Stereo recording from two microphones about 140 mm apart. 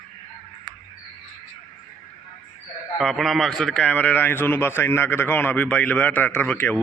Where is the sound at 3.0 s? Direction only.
Centre (ahead or behind).